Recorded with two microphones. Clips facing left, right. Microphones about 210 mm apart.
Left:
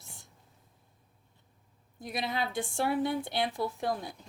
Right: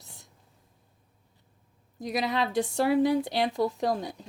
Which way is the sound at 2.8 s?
90° right.